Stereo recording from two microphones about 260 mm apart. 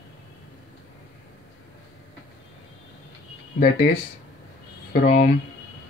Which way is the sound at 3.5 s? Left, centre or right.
Left.